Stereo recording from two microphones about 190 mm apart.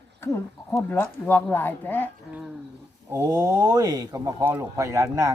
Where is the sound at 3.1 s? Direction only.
15° right (ahead or behind).